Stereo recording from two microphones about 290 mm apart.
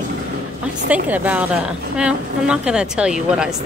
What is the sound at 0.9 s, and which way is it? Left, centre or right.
A woman's voice, centre.